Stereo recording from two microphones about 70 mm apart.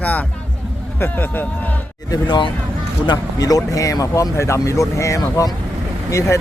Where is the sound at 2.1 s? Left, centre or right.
Left.